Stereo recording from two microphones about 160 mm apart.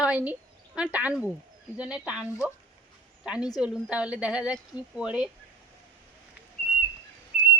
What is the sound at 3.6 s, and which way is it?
Speech, 5° right (ahead or behind).